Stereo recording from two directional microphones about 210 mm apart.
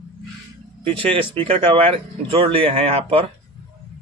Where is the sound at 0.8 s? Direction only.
25° right (ahead or behind).